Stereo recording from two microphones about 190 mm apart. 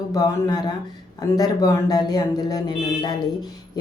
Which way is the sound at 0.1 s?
20° left (ahead or behind).